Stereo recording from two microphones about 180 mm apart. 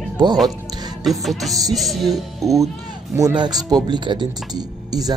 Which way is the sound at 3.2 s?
20° right (ahead or behind).